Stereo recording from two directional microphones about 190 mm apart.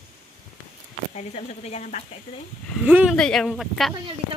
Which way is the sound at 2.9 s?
10° right (ahead or behind).